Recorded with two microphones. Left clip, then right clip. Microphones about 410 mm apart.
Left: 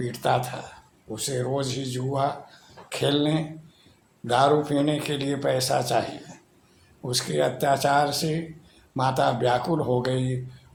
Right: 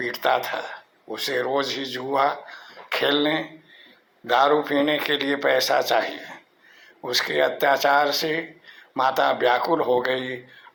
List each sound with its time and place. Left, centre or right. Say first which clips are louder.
0.0 s speech: right 3 dB; centre